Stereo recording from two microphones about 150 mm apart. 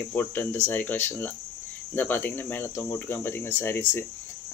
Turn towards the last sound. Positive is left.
turn(degrees=15)  # may be behind; listen again after turning